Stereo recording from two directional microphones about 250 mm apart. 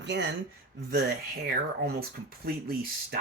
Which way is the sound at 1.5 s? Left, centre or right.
Right.